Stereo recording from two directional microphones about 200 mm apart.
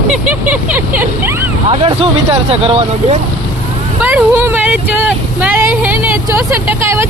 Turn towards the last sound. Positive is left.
turn(degrees=-10)  # may be behind; listen again after turning